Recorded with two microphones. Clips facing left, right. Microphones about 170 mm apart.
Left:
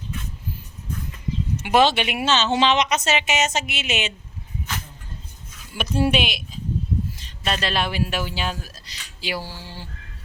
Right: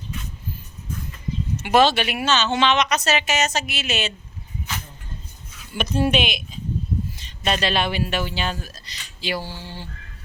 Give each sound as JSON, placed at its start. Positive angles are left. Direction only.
{"t": 1.6, "sound": "speech", "side_deg": 15}
{"t": 5.7, "sound": "speech", "side_deg": 5}
{"t": 7.4, "sound": "speech", "side_deg": 0}